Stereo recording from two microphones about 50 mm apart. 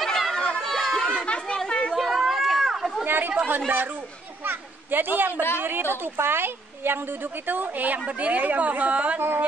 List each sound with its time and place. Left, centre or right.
0.0 s chatter: centre
2.0 s chatter: centre
3.1 s a woman's voice: right
7.4 s a woman's voice: right